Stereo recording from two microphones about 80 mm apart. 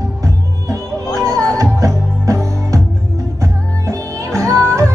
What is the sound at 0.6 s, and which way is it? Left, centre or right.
Music, right.